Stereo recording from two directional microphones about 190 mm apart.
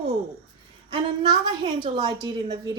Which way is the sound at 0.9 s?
25° right (ahead or behind).